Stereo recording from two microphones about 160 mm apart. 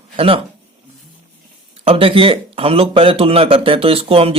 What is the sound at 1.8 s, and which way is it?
Speech, 35° right (ahead or behind).